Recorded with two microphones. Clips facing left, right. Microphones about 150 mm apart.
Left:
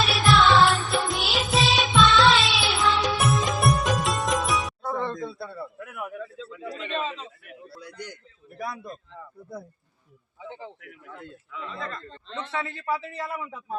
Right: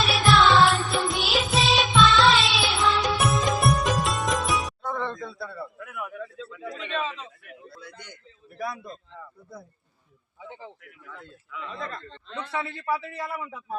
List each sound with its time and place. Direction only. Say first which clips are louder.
0.0 s music: even; centre (ahead or behind)
5.2 s a man's voice: left 2 dB; 30° left (ahead or behind)
8.5 s speech: right 1 dB; 5° right (ahead or behind)
11.5 s speech: even; 5° right (ahead or behind)
12.8 s a man's voice: right 1 dB; 15° left (ahead or behind)